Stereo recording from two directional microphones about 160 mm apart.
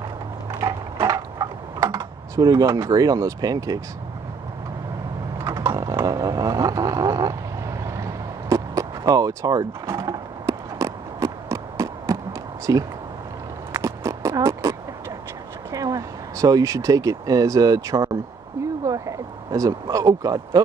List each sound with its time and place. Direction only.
0.5 s typing: 20° right (ahead or behind)
5.4 s vehicle: 20° right (ahead or behind)
7.8 s a sound: 20° right (ahead or behind)
15.7 s speech: 20° right (ahead or behind)